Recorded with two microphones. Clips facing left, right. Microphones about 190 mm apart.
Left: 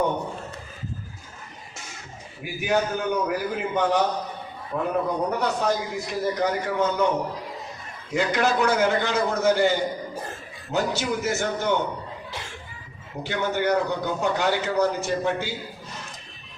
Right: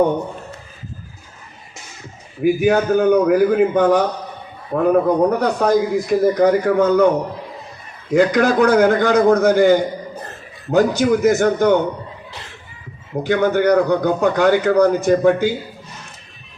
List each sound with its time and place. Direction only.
2.4 s a man's voice: 50° right (ahead or behind)
8.1 s a man's voice: 55° right (ahead or behind)
13.2 s a man's voice: 50° right (ahead or behind)